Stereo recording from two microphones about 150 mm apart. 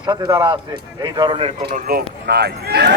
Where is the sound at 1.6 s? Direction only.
75° right (ahead or behind); by 2.9 s 90° right.